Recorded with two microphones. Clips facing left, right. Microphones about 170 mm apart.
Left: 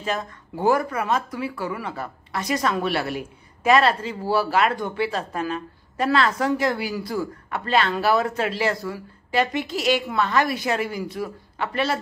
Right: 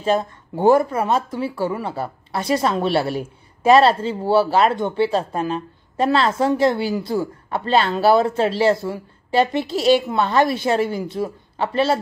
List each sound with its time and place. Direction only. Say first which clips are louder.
0.0 s speech: right 8 dB; 30° right (ahead or behind)